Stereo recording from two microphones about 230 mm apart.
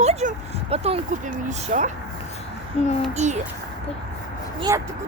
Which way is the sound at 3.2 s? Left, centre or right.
Right.